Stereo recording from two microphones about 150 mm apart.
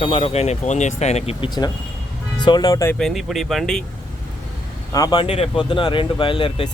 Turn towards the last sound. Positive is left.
turn(degrees=35)  # may be behind; listen again after turning